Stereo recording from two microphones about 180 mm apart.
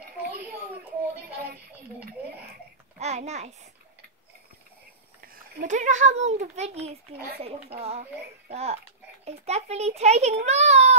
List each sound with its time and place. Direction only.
3.0 s a child's voice: 40° right (ahead or behind)
5.2 s a child's voice: 45° right (ahead or behind)